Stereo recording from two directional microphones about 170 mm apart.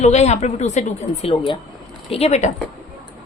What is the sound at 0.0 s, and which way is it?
A woman's voice, 40° left (ahead or behind).